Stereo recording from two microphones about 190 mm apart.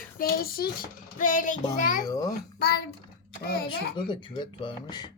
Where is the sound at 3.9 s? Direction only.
25° left (ahead or behind).